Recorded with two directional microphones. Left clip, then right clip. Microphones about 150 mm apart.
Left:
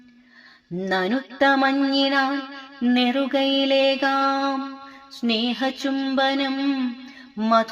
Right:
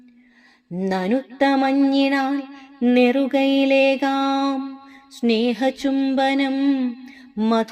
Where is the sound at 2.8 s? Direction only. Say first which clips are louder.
Right 4 dB; 60° right (ahead or behind).